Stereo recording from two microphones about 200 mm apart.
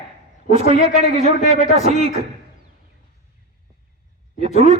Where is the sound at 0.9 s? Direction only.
30° right (ahead or behind).